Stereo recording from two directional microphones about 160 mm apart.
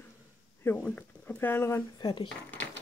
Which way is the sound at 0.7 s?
10° left (ahead or behind).